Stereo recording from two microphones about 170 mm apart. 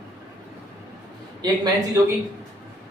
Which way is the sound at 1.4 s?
20° right (ahead or behind).